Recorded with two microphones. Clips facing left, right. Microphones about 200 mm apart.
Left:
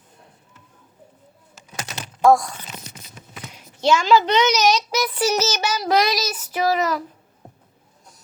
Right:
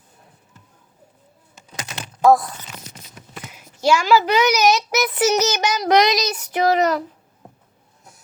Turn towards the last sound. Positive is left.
turn(degrees=-20)  # may be behind; listen again after turning